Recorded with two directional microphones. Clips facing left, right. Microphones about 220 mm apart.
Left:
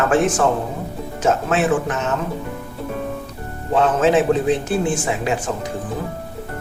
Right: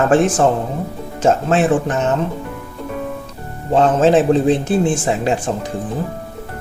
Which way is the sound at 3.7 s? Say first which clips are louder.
Right 3 dB; 35° right (ahead or behind).